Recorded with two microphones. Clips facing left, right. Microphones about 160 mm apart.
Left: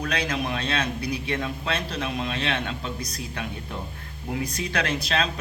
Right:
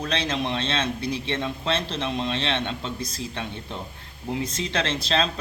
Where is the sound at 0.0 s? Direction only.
25° right (ahead or behind).